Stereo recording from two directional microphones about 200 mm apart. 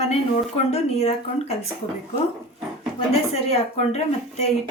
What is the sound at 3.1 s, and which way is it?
Speech, 30° left (ahead or behind).